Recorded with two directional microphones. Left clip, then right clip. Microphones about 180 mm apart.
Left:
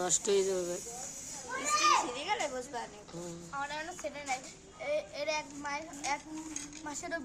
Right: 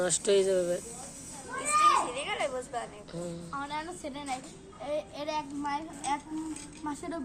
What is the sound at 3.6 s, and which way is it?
Speech, 10° left (ahead or behind).